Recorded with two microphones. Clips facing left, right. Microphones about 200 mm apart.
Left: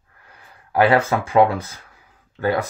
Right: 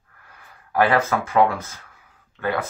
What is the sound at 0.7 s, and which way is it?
Speech, 30° left (ahead or behind).